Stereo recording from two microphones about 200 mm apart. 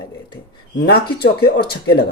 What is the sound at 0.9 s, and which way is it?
Speech, 55° left (ahead or behind).